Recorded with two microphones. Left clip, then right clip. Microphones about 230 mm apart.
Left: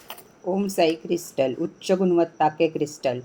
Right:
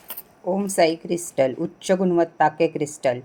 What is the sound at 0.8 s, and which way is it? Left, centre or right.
A woman's voice, right.